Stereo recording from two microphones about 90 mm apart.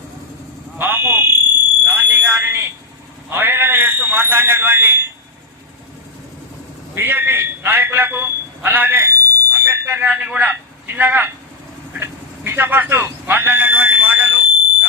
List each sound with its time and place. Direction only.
0.8 s fire alarm: 25° right (ahead or behind)
1.8 s smoke detector: 20° right (ahead or behind)
3.2 s fire alarm: 25° right (ahead or behind)
6.9 s a sound: 25° right (ahead or behind)
12.5 s fire alarm: 20° right (ahead or behind)